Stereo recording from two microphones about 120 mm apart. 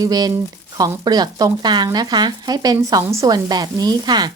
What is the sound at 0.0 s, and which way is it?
A woman's voice, 30° right (ahead or behind).